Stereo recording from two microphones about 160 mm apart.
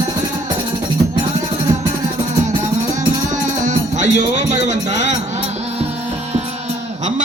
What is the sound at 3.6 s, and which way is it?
Music, 50° right (ahead or behind).